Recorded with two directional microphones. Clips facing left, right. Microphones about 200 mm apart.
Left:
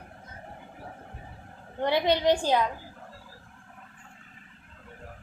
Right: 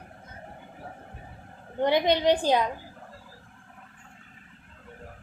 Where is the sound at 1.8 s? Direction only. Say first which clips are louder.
Right 2 dB; 15° right (ahead or behind).